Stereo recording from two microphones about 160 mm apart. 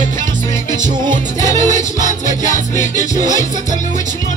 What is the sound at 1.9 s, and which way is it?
Music, 50° left (ahead or behind).